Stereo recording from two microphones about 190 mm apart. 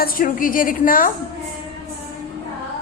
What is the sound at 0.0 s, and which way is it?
Speech, 50° left (ahead or behind).